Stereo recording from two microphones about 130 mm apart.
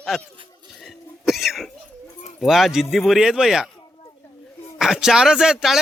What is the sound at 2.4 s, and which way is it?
Speech, centre (ahead or behind).